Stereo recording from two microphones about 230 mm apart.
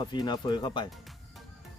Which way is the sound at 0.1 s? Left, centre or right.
Centre.